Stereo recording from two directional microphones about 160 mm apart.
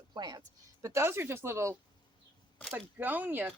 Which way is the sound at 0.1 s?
25° right (ahead or behind).